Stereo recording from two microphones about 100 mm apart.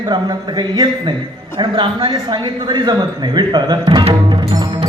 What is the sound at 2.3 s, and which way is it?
A man's voice, 50° right (ahead or behind).